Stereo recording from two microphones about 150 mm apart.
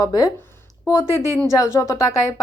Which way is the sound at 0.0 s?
25° left (ahead or behind).